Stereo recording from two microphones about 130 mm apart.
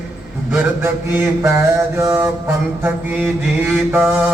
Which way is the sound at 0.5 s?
15° right (ahead or behind).